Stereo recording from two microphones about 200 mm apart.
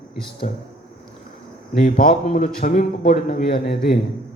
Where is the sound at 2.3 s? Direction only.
45° left (ahead or behind).